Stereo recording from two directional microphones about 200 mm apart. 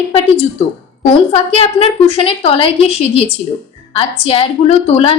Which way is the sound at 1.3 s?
30° left (ahead or behind).